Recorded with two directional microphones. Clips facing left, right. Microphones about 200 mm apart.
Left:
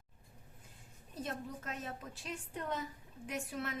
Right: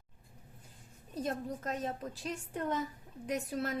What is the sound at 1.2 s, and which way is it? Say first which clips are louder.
A woman's voice: right 6 dB; 40° right (ahead or behind).